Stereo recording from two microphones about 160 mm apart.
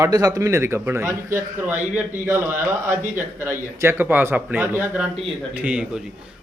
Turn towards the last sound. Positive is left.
turn(degrees=-5)  # may be behind; listen again after turning